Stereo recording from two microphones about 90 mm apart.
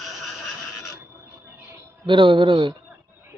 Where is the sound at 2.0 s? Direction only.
65° right (ahead or behind).